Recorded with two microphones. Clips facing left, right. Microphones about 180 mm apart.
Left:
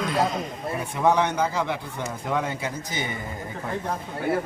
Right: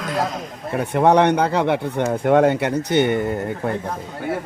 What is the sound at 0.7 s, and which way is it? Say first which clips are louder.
Speech: right 7 dB; 65° right (ahead or behind).